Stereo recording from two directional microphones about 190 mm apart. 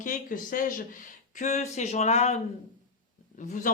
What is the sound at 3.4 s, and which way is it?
Speech, 45° left (ahead or behind).